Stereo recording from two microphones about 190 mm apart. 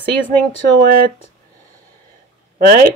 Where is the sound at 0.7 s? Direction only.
50° right (ahead or behind).